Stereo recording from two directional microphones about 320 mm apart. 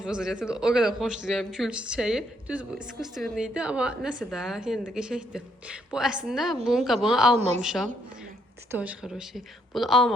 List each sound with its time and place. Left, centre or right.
0.0 s speech: centre
7.3 s a woman's voice: centre
7.6 s speech: centre